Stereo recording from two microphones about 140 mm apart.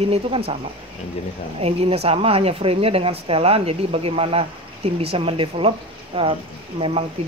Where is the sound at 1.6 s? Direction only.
45° right (ahead or behind).